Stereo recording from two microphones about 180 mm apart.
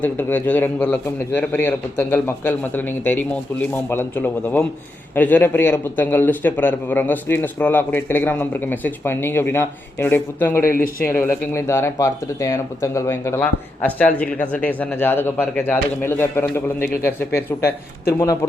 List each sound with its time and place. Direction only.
0.0 s speech: 10° left (ahead or behind)
10.6 s speech: 50° left (ahead or behind)
11.0 s speech: 10° left (ahead or behind)